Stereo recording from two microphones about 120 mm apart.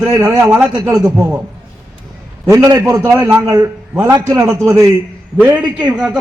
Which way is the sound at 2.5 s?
25° right (ahead or behind).